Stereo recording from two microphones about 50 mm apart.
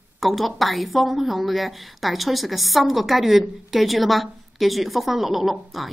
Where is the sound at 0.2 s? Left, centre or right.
Centre.